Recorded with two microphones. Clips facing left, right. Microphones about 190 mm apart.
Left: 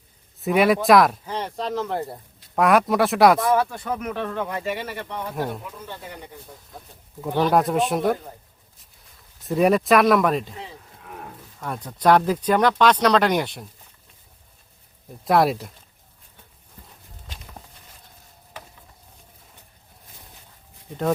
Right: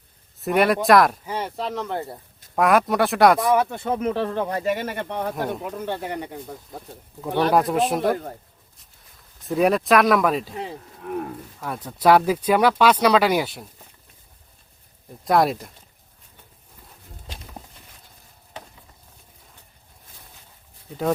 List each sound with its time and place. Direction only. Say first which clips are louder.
0.3 s speech: left 1 dB; centre (ahead or behind)
3.5 s speech: right 1 dB; 20° right (ahead or behind); by 6.3 s 70° right (ahead or behind)
7.2 s speech: even; centre (ahead or behind)
11.6 s speech: right 1 dB; 5° right (ahead or behind)
15.2 s speech: even; centre (ahead or behind)